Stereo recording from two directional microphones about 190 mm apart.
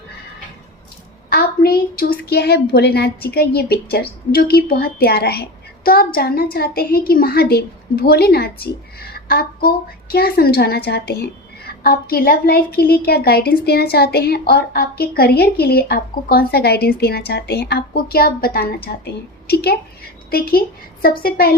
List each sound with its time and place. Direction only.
1.3 s a woman's voice: 55° left (ahead or behind)